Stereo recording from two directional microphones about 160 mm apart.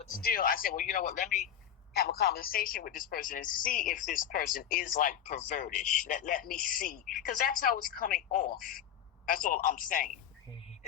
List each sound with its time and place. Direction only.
0.2 s a woman's voice: 65° left (ahead or behind)
1.9 s a woman's voice: 80° left; by 10.1 s 60° left (ahead or behind)